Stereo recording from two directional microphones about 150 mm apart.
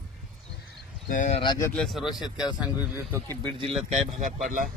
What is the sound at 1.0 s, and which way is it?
Speech, 60° left (ahead or behind).